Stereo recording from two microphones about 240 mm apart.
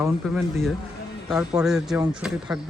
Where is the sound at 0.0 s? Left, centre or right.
Centre.